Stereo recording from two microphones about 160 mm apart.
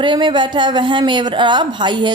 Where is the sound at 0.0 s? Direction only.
30° right (ahead or behind).